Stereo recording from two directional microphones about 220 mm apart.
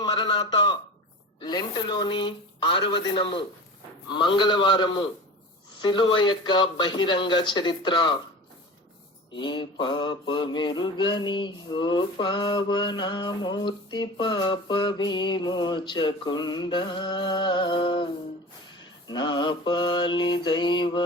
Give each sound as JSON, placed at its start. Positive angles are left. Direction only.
{"t": 0.0, "sound": "mantra", "side_deg": 20}
{"t": 9.3, "sound": "mantra", "side_deg": 20}